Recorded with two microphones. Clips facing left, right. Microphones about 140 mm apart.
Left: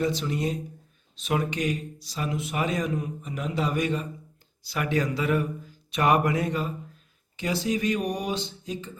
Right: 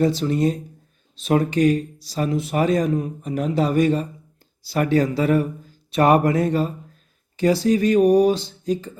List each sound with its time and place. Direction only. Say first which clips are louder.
0.0 s speech: right 8 dB; 35° right (ahead or behind)